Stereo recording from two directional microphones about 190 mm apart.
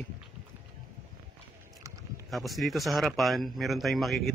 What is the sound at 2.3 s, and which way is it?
Speech, centre (ahead or behind).